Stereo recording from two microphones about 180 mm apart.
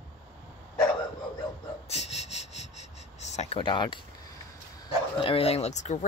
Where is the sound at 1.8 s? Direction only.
35° left (ahead or behind).